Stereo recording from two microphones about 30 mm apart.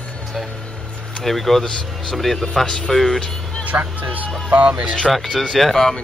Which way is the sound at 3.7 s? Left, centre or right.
Right.